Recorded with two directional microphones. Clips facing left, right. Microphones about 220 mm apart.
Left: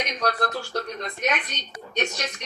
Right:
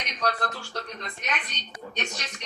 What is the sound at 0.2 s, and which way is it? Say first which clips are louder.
A woman's voice: left 1 dB; 40° left (ahead or behind).